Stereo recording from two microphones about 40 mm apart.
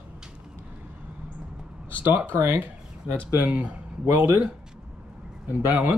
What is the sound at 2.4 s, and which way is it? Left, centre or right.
Speech, right.